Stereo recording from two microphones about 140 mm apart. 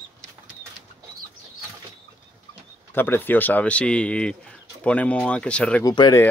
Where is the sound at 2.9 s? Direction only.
15° left (ahead or behind).